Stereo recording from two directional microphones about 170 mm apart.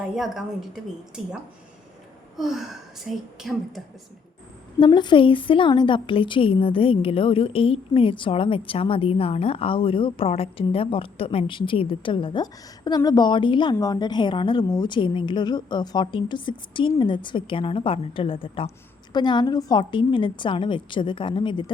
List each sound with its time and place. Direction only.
0.0 s a woman's voice: 5° right (ahead or behind)
4.8 s a woman's voice: 25° left (ahead or behind)